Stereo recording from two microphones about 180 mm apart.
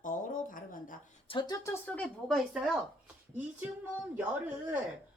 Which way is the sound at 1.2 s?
25° left (ahead or behind).